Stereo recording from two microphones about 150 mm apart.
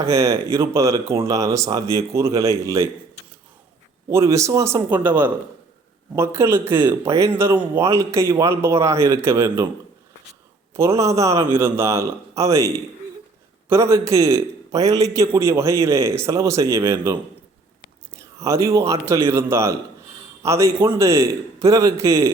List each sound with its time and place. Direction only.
0.1 s a man's voice: 20° right (ahead or behind)
4.1 s a man's voice: 20° right (ahead or behind)
10.8 s a man's voice: 20° right (ahead or behind)
18.2 s a man's voice: 20° right (ahead or behind)